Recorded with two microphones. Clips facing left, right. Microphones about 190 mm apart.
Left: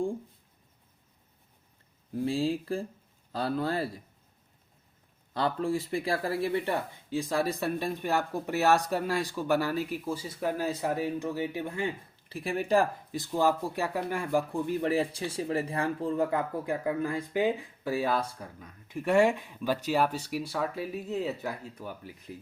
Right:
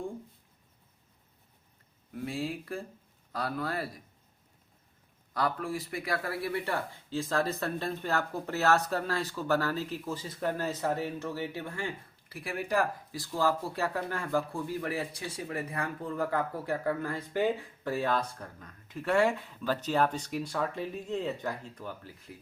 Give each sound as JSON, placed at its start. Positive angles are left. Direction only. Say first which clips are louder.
{"t": 2.1, "sound": "speech", "louder": "left 6 dB", "side_deg": 30}
{"t": 5.3, "sound": "speech", "louder": "left 3 dB", "side_deg": 25}